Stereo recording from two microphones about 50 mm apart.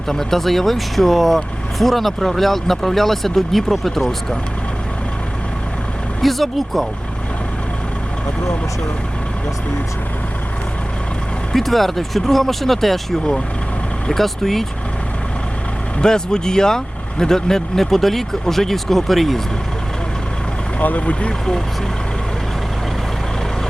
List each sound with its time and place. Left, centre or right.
0.1 s speech: centre
6.2 s speech: centre
11.5 s speech: centre
16.0 s speech: centre
20.8 s speech: left